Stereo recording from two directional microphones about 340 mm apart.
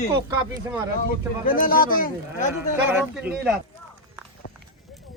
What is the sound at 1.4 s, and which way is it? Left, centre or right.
Speech, left.